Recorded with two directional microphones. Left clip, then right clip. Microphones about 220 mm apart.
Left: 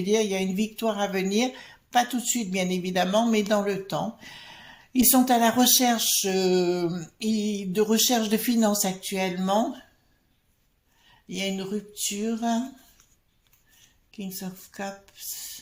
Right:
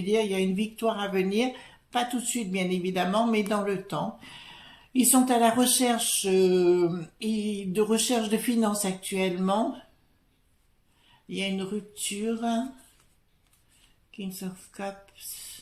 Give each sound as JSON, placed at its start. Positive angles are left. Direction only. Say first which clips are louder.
{"t": 0.0, "sound": "speech", "louder": "left 1 dB", "side_deg": 30}
{"t": 11.3, "sound": "speech", "louder": "left 1 dB", "side_deg": 30}
{"t": 14.4, "sound": "speech", "louder": "left 1 dB", "side_deg": 25}